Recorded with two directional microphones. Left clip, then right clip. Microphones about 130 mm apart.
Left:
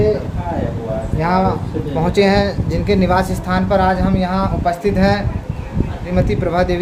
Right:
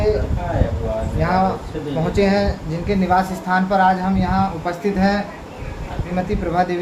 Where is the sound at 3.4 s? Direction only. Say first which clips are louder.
Right 1 dB; 90° left; by 5.1 s 70° left (ahead or behind).